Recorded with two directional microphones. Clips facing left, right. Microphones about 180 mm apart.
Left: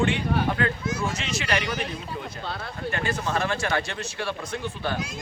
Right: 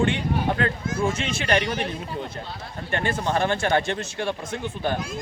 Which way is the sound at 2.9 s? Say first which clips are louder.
Right 3 dB; 30° right (ahead or behind).